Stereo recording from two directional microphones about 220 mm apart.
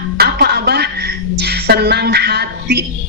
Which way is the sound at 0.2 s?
45° right (ahead or behind).